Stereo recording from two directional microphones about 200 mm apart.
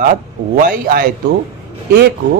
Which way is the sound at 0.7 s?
45° right (ahead or behind).